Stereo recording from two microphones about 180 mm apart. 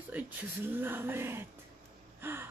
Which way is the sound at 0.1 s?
10° right (ahead or behind).